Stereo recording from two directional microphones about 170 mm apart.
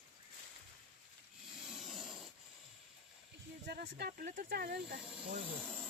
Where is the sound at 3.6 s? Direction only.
70° right (ahead or behind).